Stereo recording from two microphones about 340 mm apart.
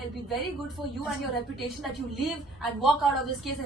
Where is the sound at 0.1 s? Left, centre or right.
Centre.